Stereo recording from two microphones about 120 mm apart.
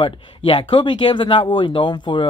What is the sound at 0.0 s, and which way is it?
Speech, 45° left (ahead or behind).